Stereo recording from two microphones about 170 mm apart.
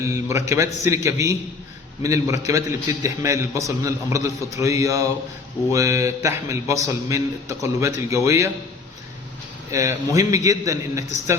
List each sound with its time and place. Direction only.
0.0 s a man's voice: 15° right (ahead or behind)
9.7 s a man's voice: 20° right (ahead or behind)